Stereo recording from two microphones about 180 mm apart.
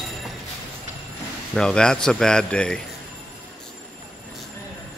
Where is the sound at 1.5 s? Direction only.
5° left (ahead or behind).